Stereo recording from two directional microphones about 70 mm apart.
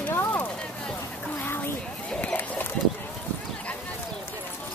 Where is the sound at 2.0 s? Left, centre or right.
Centre.